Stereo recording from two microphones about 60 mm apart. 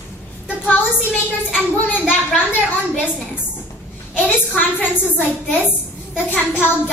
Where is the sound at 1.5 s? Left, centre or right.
Left.